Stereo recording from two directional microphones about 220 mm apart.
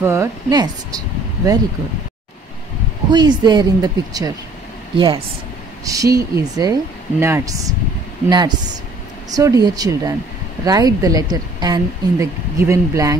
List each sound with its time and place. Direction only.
0.0 s speech: 15° right (ahead or behind)
3.1 s a woman's voice: 20° right (ahead or behind)